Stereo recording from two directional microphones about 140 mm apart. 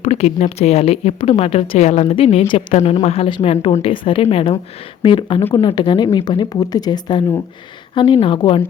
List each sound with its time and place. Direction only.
0.0 s speech: 50° left (ahead or behind); by 8.6 s 35° left (ahead or behind)